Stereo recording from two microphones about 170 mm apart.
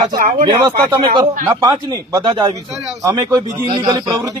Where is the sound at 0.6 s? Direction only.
20° right (ahead or behind).